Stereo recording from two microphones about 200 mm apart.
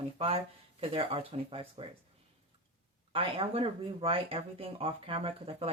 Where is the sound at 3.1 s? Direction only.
25° right (ahead or behind).